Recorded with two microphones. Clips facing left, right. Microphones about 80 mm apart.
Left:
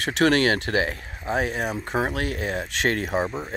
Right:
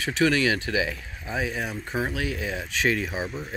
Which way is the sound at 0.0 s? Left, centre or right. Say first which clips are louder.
Left 3 dB; left.